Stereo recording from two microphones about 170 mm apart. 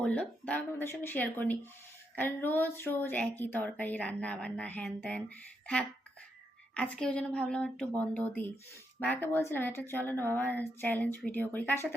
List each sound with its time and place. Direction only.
0.0 s speech: 5° left (ahead or behind)
6.7 s speech: 5° left (ahead or behind)